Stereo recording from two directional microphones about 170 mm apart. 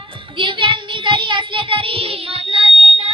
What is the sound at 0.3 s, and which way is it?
Child singing, 30° right (ahead or behind).